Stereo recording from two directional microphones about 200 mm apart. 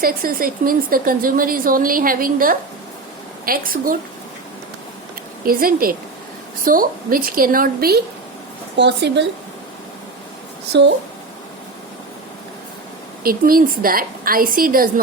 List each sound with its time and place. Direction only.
0.0 s a woman's voice: 45° right (ahead or behind)
5.5 s a woman's voice: 45° right (ahead or behind)
10.7 s speech: 60° right (ahead or behind)
13.2 s a woman's voice: 45° right (ahead or behind)